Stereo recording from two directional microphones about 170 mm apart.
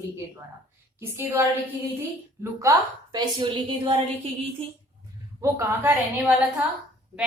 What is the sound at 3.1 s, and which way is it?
Speech, 30° right (ahead or behind).